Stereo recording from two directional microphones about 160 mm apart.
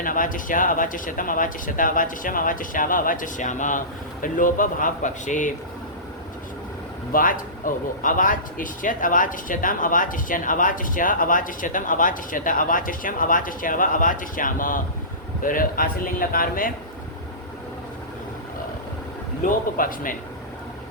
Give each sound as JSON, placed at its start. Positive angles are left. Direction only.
{"t": 0.0, "sound": "speech", "side_deg": 60}
{"t": 7.1, "sound": "speech", "side_deg": 60}
{"t": 19.4, "sound": "speech", "side_deg": 60}